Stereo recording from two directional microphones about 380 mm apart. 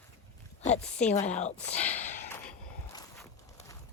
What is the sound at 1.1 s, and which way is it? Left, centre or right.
Speech, centre.